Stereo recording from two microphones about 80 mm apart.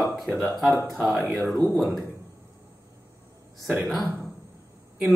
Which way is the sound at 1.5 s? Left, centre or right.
Right.